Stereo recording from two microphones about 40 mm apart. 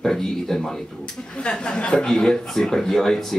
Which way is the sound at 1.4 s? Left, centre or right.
Left.